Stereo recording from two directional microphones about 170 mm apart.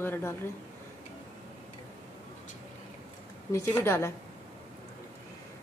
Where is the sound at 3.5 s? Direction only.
15° left (ahead or behind).